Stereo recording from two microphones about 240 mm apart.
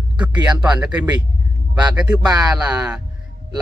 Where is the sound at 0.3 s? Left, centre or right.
Centre.